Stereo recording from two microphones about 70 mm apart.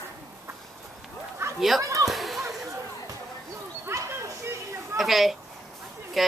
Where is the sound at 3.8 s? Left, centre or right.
Right.